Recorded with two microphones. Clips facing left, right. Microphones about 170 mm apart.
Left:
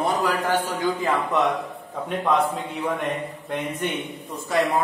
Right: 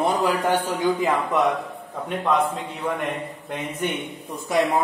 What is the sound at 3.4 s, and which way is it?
Speech, 10° right (ahead or behind).